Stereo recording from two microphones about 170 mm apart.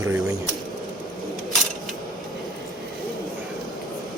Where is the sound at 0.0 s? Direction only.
15° right (ahead or behind).